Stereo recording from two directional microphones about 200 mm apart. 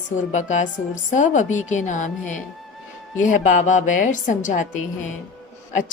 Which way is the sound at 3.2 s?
40° left (ahead or behind).